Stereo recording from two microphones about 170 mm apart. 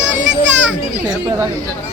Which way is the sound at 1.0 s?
20° right (ahead or behind).